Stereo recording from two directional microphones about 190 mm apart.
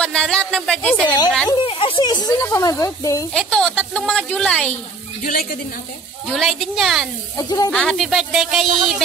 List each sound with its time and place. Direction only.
0.0 s a woman's voice: 5° left (ahead or behind)
1.0 s speech: 20° left (ahead or behind)
3.3 s a woman's voice: 5° left (ahead or behind)
5.2 s a woman's voice: 50° left (ahead or behind)
6.3 s a woman's voice: centre (ahead or behind)
7.3 s speech: 20° left (ahead or behind)
7.7 s a woman's voice: 5° left (ahead or behind)